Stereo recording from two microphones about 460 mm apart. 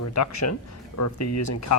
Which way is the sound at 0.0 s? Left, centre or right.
Left.